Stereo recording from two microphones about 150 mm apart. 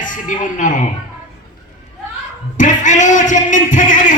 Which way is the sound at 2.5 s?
55° left (ahead or behind).